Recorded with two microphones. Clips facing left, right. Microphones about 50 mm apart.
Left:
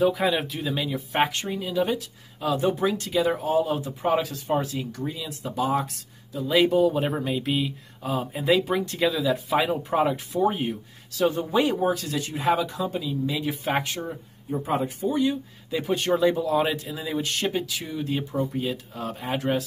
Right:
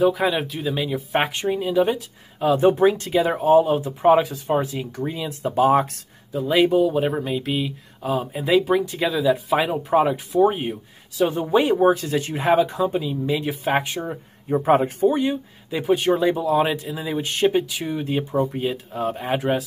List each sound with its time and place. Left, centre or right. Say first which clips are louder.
0.0 s speech: right 3 dB; centre
1.1 s speech: right 2 dB; centre
4.1 s speech: right 7 dB; centre; by 5.9 s right
6.5 s speech: right 2 dB; centre
11.2 s speech: right 3 dB; right
13.4 s speech: right 4 dB; centre
14.6 s speech: right 9 dB; right
15.7 s speech: right 4 dB; centre; by 19.3 s right
19.3 s speech: right 3 dB; centre